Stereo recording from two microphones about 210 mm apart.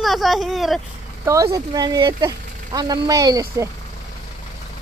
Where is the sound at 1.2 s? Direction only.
15° right (ahead or behind).